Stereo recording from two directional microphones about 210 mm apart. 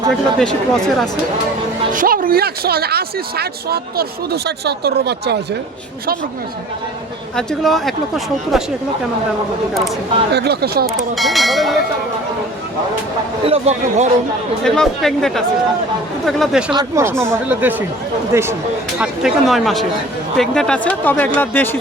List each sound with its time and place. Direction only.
0.3 s speech: 5° left (ahead or behind)
1.9 s speech: 40° right (ahead or behind)
7.3 s speech: centre (ahead or behind)
10.3 s speech: 50° right (ahead or behind)
11.1 s speech: centre (ahead or behind)
13.4 s speech: 30° right (ahead or behind)
14.6 s speech: centre (ahead or behind)
16.7 s speech: 15° right (ahead or behind); by 21.8 s 10° left (ahead or behind)